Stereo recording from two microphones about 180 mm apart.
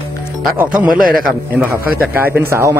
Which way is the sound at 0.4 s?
5° right (ahead or behind).